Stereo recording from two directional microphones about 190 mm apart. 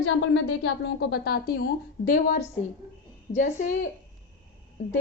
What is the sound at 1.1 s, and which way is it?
A woman's voice, 55° left (ahead or behind).